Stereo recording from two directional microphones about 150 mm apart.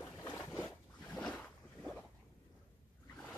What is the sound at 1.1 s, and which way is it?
Boat, 5° left (ahead or behind).